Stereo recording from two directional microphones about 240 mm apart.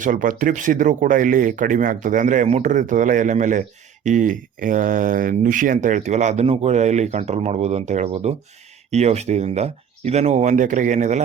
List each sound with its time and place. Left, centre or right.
0.0 s speech: right